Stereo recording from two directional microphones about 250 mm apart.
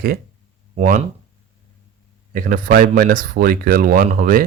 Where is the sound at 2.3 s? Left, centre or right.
Right.